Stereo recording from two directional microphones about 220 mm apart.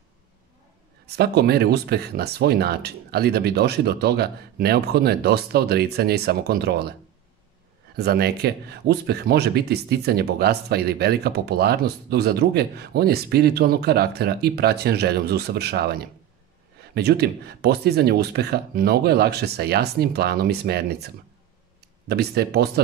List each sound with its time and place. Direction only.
1.0 s speech: 45° right (ahead or behind)
22.0 s speech: 45° right (ahead or behind)